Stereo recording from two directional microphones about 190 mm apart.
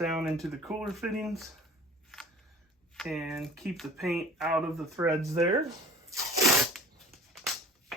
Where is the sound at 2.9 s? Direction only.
Centre (ahead or behind).